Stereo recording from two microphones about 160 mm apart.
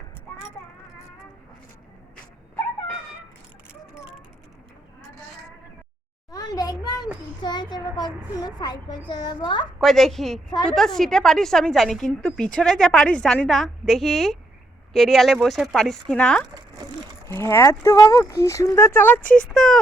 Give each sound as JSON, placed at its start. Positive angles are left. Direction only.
{"t": 6.3, "sound": "a sound", "side_deg": 25}
{"t": 7.4, "sound": "a child's voice", "side_deg": 25}
{"t": 9.8, "sound": "a woman's voice", "side_deg": 0}
{"t": 17.2, "sound": "speech", "side_deg": 15}
{"t": 19.2, "sound": "speech", "side_deg": 55}
{"t": 19.5, "sound": "a woman's voice", "side_deg": 5}